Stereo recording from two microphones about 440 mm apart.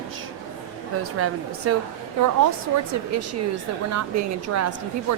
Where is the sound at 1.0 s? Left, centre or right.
Right.